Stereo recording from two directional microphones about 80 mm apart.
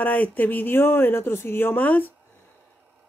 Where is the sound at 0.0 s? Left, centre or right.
Left.